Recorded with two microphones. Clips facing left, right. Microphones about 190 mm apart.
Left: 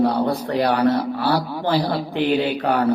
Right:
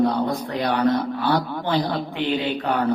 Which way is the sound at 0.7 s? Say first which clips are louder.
Left 2 dB; 10° left (ahead or behind).